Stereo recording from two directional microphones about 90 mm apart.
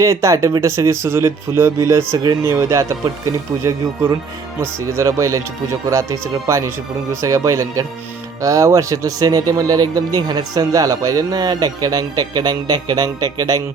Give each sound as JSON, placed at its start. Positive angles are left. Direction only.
{"t": 0.0, "sound": "speech", "side_deg": -35}